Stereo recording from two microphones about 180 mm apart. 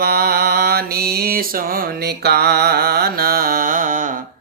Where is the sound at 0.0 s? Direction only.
60° right (ahead or behind).